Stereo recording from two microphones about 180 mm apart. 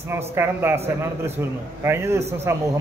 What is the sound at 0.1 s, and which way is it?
A man's voice, 15° right (ahead or behind).